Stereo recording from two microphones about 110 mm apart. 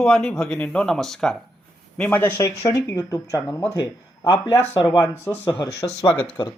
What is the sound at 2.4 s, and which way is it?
Speech, 35° left (ahead or behind).